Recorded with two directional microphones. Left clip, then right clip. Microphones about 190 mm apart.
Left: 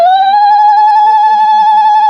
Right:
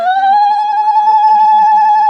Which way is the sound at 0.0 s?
55° left (ahead or behind).